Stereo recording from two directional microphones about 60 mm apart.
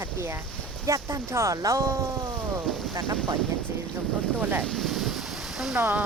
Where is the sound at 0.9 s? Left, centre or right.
Right.